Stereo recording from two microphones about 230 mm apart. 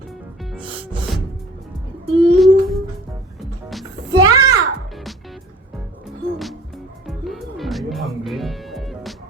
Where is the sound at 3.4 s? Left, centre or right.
Centre.